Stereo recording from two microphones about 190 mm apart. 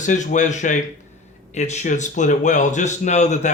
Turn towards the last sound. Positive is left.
turn(degrees=35)  # may be behind; listen again after turning